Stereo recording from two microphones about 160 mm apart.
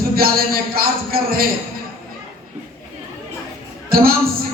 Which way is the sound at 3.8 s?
65° right (ahead or behind).